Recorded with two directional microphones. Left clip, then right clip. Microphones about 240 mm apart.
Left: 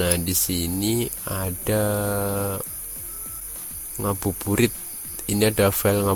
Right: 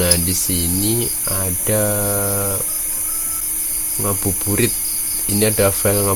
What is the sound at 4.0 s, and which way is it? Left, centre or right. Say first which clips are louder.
Speech: right 2 dB; left.